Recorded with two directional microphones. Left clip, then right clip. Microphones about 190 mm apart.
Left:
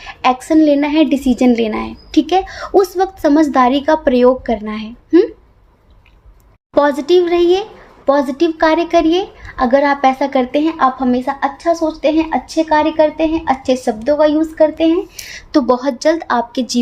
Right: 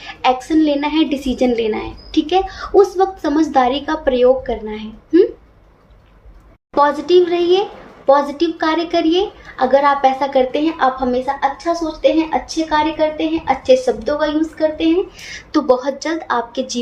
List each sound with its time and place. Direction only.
0.1 s a woman's voice: 50° left (ahead or behind)
6.7 s a woman's voice: 50° left (ahead or behind)